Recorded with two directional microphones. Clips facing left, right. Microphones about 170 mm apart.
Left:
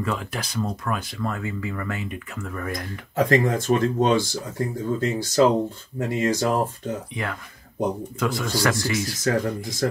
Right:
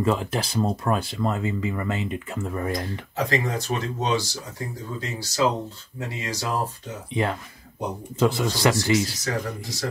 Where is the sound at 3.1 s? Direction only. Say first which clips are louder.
Left 6 dB; 50° left (ahead or behind).